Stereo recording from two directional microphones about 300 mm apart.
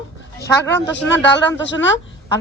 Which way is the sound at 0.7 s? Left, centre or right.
Left.